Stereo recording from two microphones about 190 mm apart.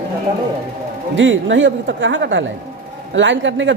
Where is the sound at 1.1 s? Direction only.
75° right (ahead or behind).